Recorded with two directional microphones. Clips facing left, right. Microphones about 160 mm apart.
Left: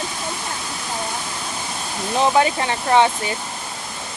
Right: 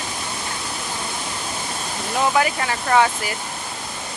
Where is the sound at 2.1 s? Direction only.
25° left (ahead or behind).